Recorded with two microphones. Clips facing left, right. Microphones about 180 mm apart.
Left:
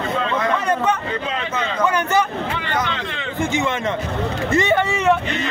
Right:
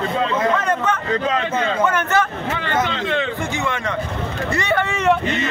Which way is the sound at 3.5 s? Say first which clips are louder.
Left 2 dB; 20° left (ahead or behind).